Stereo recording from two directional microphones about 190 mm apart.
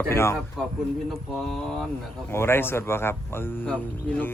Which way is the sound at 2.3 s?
10° left (ahead or behind).